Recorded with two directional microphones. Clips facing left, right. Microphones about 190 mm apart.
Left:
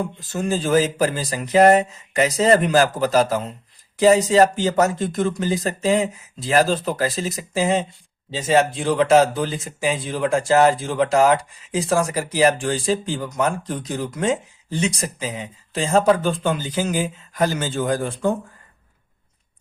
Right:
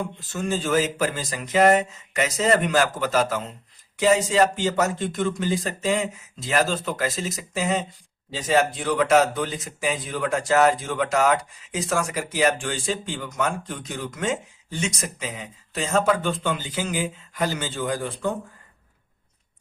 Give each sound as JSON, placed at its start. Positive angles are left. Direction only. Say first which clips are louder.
{"t": 0.3, "sound": "speech", "louder": "left 4 dB", "side_deg": 35}